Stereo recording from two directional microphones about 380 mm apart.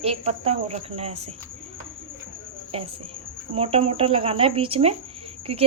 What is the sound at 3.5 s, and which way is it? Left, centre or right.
Speech, centre.